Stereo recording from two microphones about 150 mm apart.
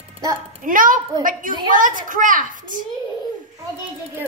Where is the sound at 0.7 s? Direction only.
65° right (ahead or behind).